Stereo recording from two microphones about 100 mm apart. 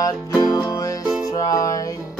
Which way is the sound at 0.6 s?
35° left (ahead or behind).